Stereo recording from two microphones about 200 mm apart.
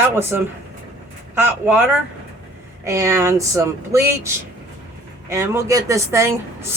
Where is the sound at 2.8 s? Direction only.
15° right (ahead or behind).